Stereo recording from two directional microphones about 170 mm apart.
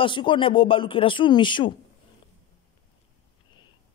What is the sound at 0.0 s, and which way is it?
Speech, 30° left (ahead or behind).